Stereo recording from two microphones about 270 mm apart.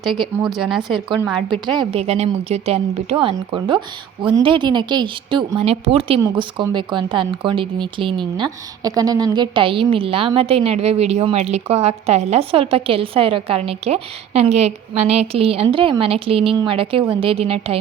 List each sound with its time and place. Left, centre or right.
0.4 s a woman's voice: centre
1.4 s a woman's voice: centre